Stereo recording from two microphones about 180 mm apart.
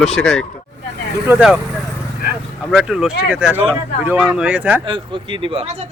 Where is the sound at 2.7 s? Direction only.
5° right (ahead or behind).